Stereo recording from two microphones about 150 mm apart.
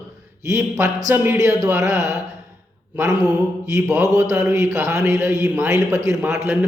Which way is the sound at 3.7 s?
20° right (ahead or behind).